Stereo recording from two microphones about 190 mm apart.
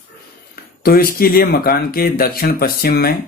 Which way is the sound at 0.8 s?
50° left (ahead or behind).